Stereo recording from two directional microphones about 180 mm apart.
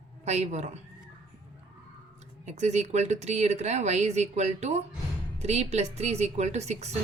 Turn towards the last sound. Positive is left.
turn(degrees=-35)  # may be behind; listen again after turning